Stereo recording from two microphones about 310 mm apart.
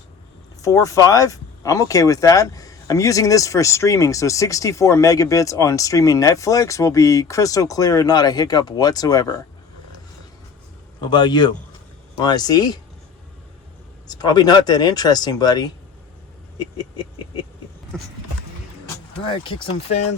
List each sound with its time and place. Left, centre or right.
0.6 s speech: centre
11.0 s speech: centre
14.1 s speech: centre
16.6 s a sound: centre
17.9 s a sound: centre
19.3 s speech: centre